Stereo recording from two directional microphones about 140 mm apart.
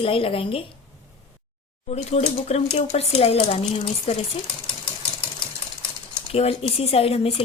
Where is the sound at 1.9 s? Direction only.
50° left (ahead or behind).